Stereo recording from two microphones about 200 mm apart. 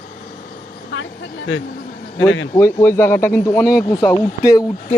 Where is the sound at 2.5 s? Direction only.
15° left (ahead or behind).